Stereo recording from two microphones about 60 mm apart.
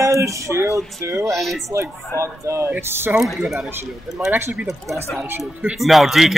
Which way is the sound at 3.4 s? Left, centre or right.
Centre.